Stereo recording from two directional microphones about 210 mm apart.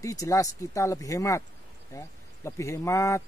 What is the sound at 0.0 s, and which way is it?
A man's voice, 15° left (ahead or behind).